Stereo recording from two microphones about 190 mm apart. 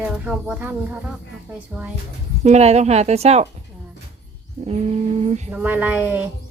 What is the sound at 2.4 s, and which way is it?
A woman's voice, 35° right (ahead or behind).